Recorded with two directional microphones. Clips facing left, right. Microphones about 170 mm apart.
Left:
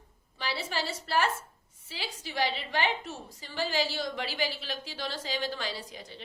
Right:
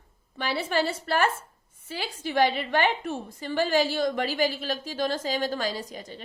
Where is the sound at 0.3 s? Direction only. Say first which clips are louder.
Right 7 dB; 55° right (ahead or behind).